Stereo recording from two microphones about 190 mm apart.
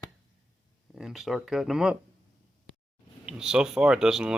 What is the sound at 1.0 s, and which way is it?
Speech, centre (ahead or behind).